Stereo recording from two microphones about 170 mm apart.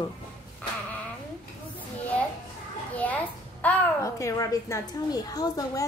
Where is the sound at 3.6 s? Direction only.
10° left (ahead or behind).